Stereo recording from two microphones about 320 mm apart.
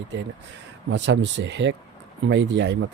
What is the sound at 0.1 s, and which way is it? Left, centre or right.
Speech, right.